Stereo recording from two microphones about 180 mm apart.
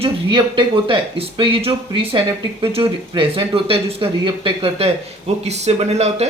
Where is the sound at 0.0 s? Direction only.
25° right (ahead or behind).